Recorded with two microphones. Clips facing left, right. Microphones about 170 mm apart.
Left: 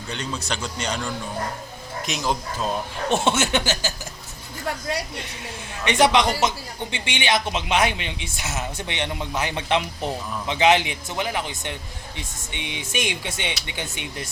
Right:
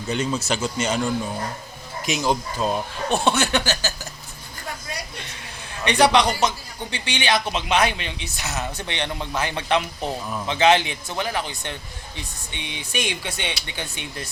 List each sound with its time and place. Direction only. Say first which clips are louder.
0.1 s speech: right 6 dB; 10° right (ahead or behind)
2.0 s speech: right 4 dB; centre (ahead or behind)
3.1 s speech: even; 25° left (ahead or behind)
5.8 s speech: right 1 dB; 20° left (ahead or behind)